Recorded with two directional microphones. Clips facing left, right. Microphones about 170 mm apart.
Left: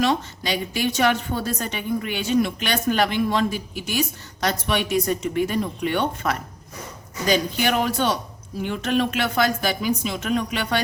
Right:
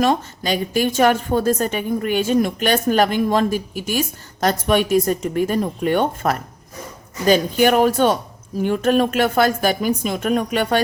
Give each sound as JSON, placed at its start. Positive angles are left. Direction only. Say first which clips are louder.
{"t": 0.0, "sound": "a woman's voice", "louder": "right 4 dB", "side_deg": -45}